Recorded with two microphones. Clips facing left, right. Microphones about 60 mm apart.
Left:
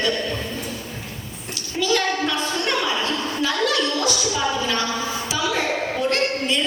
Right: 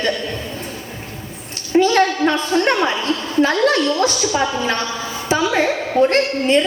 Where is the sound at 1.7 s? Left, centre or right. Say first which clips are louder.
Right 8 dB; right.